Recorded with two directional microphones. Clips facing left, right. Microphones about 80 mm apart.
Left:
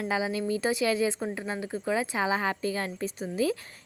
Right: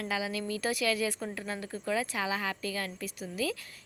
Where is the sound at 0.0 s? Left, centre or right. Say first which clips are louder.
Left 5 dB; left.